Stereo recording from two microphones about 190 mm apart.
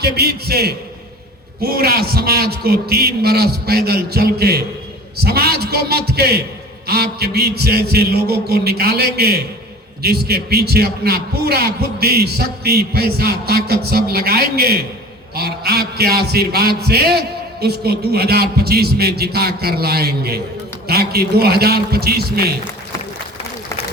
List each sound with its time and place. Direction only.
0.0 s a man's voice: 60° right (ahead or behind)